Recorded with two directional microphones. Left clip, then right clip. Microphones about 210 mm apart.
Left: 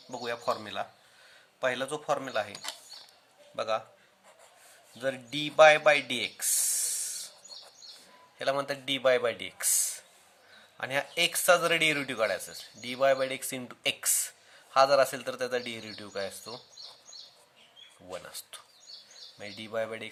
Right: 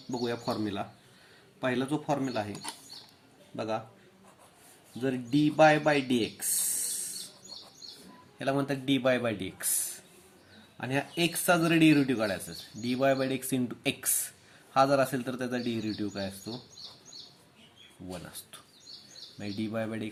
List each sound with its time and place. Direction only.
0.2 s a man's voice: 30° left (ahead or behind)
4.9 s speech: 35° left (ahead or behind)
8.4 s speech: 25° left (ahead or behind)
16.8 s bird: 50° right (ahead or behind)
18.1 s speech: 25° left (ahead or behind)